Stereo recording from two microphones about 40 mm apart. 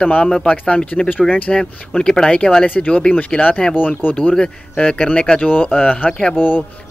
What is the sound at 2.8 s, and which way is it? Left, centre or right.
Speech, left.